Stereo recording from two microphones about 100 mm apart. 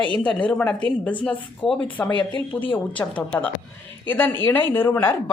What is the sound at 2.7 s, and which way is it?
A woman's voice, 15° left (ahead or behind).